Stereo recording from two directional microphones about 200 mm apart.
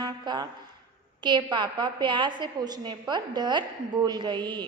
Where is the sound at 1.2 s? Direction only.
20° right (ahead or behind).